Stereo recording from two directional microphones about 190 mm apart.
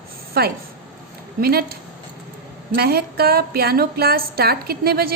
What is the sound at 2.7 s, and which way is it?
A woman's voice, 55° right (ahead or behind).